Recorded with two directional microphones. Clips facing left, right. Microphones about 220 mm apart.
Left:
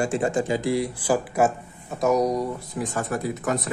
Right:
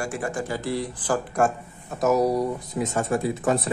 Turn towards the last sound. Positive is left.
turn(degrees=-30)  # may be behind; listen again after turning